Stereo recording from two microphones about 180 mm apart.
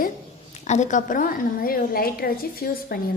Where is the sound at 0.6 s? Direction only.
40° left (ahead or behind).